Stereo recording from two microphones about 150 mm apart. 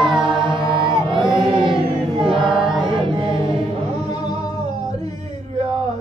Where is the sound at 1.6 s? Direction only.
30° right (ahead or behind).